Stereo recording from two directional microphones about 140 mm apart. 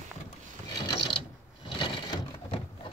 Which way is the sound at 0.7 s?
35° left (ahead or behind).